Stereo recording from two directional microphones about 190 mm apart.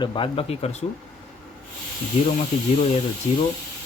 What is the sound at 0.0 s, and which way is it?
Speech, 25° left (ahead or behind).